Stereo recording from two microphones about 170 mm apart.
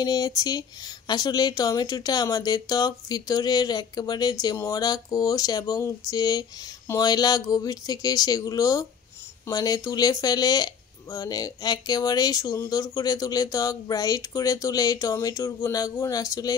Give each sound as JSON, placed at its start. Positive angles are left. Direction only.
{"t": 0.0, "sound": "speech", "side_deg": 20}